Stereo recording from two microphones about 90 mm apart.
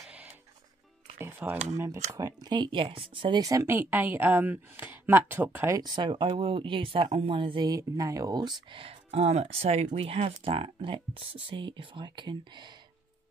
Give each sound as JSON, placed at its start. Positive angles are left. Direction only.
{"t": 1.1, "sound": "music", "side_deg": -25}
{"t": 1.7, "sound": "speech", "side_deg": -35}
{"t": 3.3, "sound": "speech", "side_deg": -40}
{"t": 3.6, "sound": "a woman's voice", "side_deg": -20}
{"t": 5.8, "sound": "speech", "side_deg": -55}
{"t": 7.6, "sound": "speech", "side_deg": -40}
{"t": 8.4, "sound": "speech", "side_deg": -70}
{"t": 9.5, "sound": "speech", "side_deg": -90}